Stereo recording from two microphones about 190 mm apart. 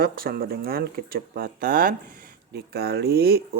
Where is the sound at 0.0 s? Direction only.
50° right (ahead or behind).